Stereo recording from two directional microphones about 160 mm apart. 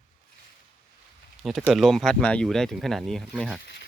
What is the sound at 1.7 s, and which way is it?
Speech, centre (ahead or behind).